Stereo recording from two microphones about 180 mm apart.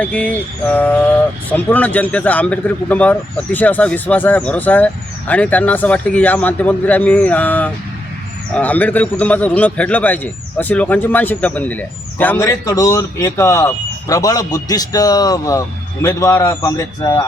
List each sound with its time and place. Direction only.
0.0 s a man's voice: 10° left (ahead or behind)